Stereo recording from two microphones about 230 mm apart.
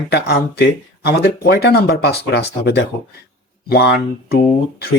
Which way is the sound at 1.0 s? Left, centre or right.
Left.